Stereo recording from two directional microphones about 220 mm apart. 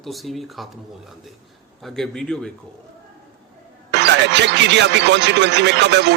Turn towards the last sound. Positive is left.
turn(degrees=-50)  # may be behind; listen again after turning